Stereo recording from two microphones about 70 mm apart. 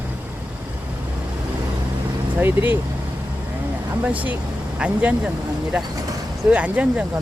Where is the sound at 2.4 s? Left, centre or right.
Right.